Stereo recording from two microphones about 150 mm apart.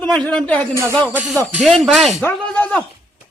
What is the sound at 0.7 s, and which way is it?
Music, 20° right (ahead or behind).